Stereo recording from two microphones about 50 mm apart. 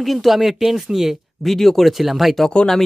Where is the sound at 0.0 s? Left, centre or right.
Centre.